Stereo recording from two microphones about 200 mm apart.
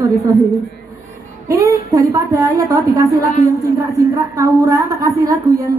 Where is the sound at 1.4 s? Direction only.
15° right (ahead or behind).